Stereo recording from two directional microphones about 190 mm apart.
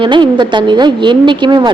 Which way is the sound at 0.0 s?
25° right (ahead or behind).